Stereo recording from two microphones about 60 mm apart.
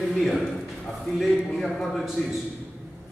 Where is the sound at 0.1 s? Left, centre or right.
Centre.